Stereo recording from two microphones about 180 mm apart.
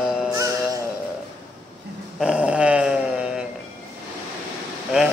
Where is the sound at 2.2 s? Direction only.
5° right (ahead or behind).